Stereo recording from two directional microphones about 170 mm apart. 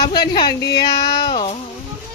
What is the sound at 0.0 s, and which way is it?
Speech, 25° left (ahead or behind).